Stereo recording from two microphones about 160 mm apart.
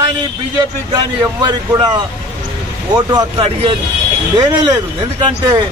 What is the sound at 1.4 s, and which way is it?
Speech, 25° right (ahead or behind).